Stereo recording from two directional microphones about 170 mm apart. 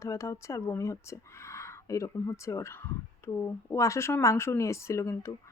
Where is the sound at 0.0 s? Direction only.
15° left (ahead or behind).